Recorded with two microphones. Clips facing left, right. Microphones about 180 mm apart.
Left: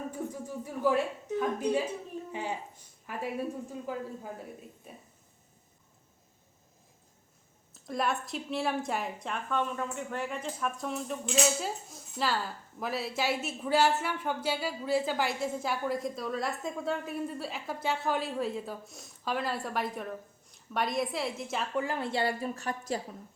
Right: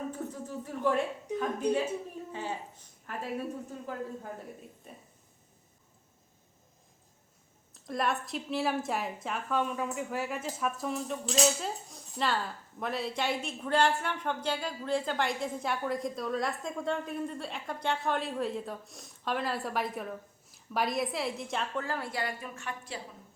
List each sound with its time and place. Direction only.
0.1 s a sound: 10° left (ahead or behind)
2.3 s a woman's voice: 15° left (ahead or behind)
7.7 s a woman's voice: centre (ahead or behind)
21.8 s a woman's voice: 20° left (ahead or behind); by 23.0 s 40° left (ahead or behind)